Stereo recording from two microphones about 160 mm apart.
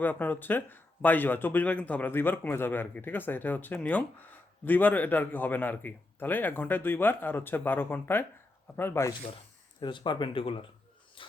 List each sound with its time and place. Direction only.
0.0 s speech: 10° left (ahead or behind)
9.8 s speech: 30° left (ahead or behind)
11.2 s a sound: 35° left (ahead or behind)